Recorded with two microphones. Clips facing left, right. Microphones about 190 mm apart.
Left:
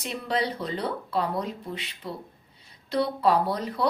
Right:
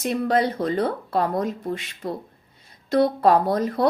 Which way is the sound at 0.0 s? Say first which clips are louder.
Right 7 dB; 50° right (ahead or behind).